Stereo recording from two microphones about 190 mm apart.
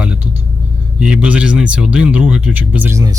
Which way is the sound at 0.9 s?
5° right (ahead or behind).